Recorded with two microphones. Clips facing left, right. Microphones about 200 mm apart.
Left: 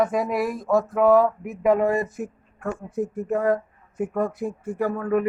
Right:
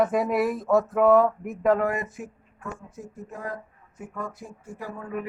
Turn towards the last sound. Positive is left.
turn(degrees=65)  # may be behind; listen again after turning